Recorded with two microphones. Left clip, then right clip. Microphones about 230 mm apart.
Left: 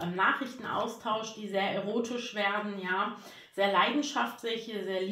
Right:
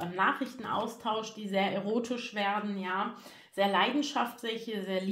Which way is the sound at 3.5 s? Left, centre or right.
Right.